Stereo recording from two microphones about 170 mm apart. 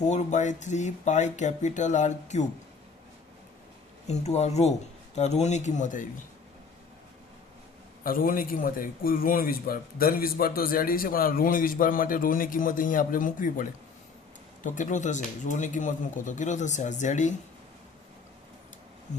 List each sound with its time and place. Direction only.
0.0 s speech: 45° left (ahead or behind)
4.0 s speech: 40° left (ahead or behind)
8.0 s a man's voice: 55° left (ahead or behind)